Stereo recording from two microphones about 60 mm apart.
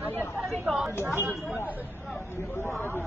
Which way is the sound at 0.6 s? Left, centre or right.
Centre.